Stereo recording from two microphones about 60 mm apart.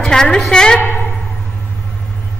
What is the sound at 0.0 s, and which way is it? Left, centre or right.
Speech, centre.